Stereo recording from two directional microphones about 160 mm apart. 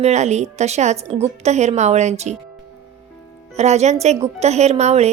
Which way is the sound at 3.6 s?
45° right (ahead or behind).